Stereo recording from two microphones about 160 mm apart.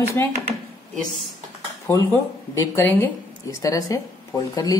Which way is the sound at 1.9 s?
15° left (ahead or behind).